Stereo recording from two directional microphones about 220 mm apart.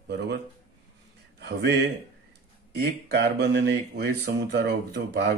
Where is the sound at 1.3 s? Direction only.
50° right (ahead or behind).